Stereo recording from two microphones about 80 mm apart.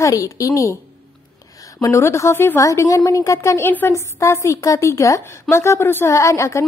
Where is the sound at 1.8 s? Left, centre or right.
Left.